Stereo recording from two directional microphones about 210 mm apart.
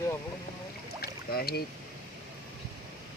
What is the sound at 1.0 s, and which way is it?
Boat, 45° left (ahead or behind).